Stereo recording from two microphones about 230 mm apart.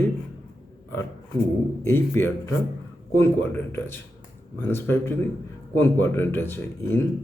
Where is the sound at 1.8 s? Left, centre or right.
Centre.